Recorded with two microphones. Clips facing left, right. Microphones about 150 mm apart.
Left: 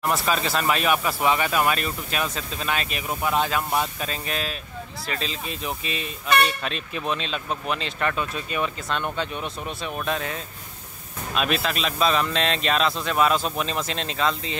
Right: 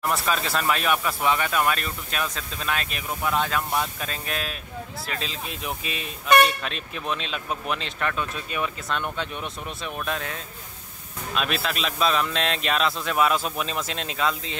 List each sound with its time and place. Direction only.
0.0 s speech: centre (ahead or behind)